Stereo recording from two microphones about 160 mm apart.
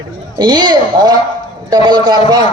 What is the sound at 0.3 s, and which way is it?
A man's voice, 25° right (ahead or behind).